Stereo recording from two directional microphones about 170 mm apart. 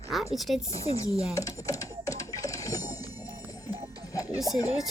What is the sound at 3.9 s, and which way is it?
Music, 20° left (ahead or behind).